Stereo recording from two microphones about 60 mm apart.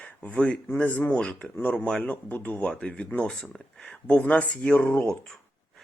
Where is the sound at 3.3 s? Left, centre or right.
Centre; by 5.2 s left.